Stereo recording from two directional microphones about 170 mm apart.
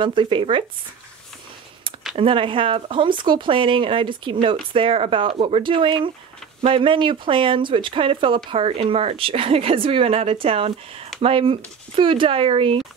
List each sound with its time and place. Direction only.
0.0 s speech: 30° right (ahead or behind)
2.1 s speech: 30° right (ahead or behind)